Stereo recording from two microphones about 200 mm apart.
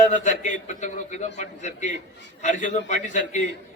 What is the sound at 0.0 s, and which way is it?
A man's voice, 35° left (ahead or behind).